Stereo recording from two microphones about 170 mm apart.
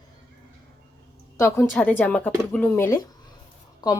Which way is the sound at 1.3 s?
15° left (ahead or behind).